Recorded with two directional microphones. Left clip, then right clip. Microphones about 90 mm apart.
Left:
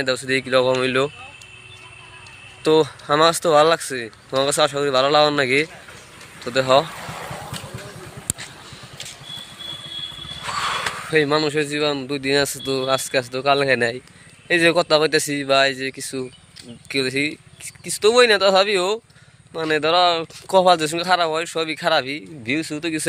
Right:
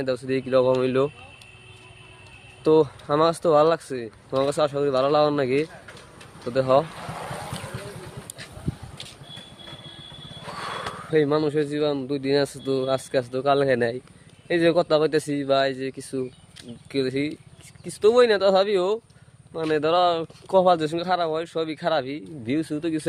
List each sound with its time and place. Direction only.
0.0 s speech: 20° right (ahead or behind); by 1.1 s 40° right (ahead or behind)
2.6 s speech: 30° right (ahead or behind)
10.4 s a sound: 60° right (ahead or behind)
10.9 s speech: 25° right (ahead or behind)
14.4 s speech: 20° right (ahead or behind)
19.7 s speech: 40° right (ahead or behind)
20.5 s speech: 15° right (ahead or behind)
22.4 s speech: 50° right (ahead or behind)